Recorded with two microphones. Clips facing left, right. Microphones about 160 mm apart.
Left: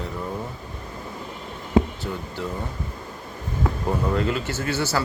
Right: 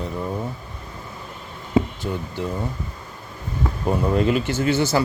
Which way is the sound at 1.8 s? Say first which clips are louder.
Even; centre (ahead or behind).